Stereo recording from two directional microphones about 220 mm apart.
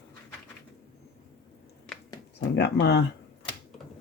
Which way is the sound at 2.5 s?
50° left (ahead or behind).